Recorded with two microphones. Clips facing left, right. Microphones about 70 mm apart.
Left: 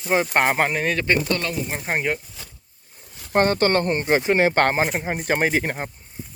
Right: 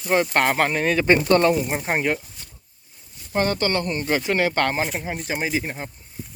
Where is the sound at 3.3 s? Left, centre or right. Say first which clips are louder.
Left 4 dB; left.